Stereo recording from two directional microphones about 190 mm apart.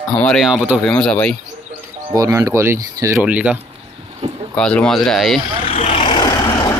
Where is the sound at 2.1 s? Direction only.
15° right (ahead or behind).